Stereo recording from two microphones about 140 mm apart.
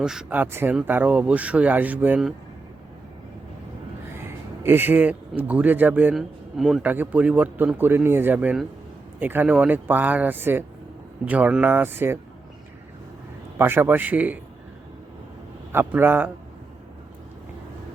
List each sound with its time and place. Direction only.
0.0 s speech: 5° right (ahead or behind)
4.2 s a man's voice: 15° right (ahead or behind)
13.6 s speech: 15° right (ahead or behind)
15.7 s speech: 15° right (ahead or behind)